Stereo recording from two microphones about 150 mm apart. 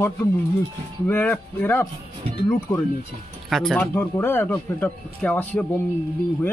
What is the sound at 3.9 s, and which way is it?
A man's voice, 15° left (ahead or behind).